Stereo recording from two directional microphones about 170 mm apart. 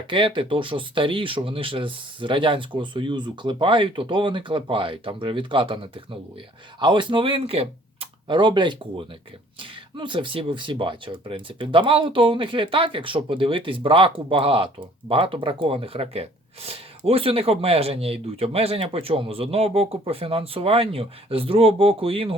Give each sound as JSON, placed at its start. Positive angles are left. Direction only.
{"t": 0.1, "sound": "speech", "side_deg": -30}